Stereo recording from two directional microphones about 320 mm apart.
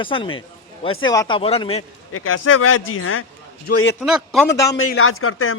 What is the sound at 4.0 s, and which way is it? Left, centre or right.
Speech, centre.